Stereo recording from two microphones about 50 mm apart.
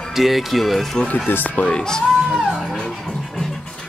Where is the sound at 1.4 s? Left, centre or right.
Left.